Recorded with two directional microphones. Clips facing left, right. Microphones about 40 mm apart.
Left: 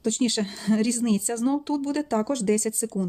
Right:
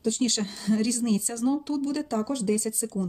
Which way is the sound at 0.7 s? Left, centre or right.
Left.